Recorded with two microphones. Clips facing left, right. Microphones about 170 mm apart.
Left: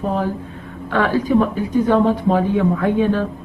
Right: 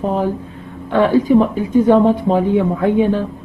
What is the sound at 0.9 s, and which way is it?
A woman's voice, 20° right (ahead or behind).